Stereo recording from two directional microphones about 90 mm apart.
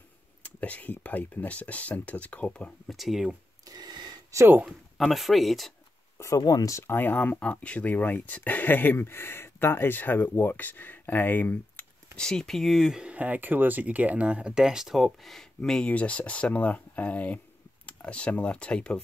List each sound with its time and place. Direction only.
0.4 s speech: 15° left (ahead or behind)
2.9 s speech: centre (ahead or behind)
3.6 s a sound: 50° right (ahead or behind)
4.3 s speech: 30° right (ahead or behind)
4.6 s speech: centre (ahead or behind)
6.1 s speech: 35° left (ahead or behind)
6.8 s speech: 25° left (ahead or behind)
12.2 s speech: 5° left (ahead or behind)